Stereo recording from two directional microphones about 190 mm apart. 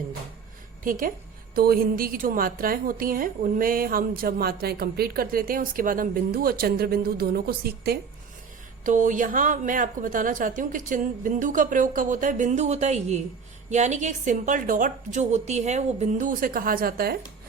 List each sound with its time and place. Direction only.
0.9 s a woman's voice: 45° right (ahead or behind)
8.8 s a woman's voice: 40° right (ahead or behind)